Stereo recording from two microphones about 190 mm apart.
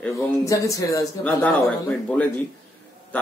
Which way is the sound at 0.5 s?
15° left (ahead or behind).